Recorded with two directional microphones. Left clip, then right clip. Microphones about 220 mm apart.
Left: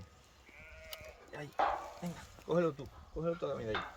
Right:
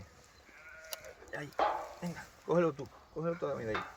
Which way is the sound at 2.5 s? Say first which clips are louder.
Right 3 dB; 25° right (ahead or behind).